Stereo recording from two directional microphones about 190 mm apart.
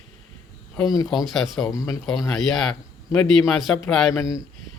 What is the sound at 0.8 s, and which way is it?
Speech, 20° left (ahead or behind).